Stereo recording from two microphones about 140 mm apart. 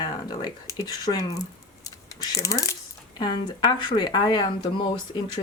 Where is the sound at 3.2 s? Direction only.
30° left (ahead or behind).